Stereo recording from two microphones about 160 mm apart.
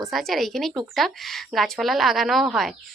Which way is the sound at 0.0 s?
Centre (ahead or behind).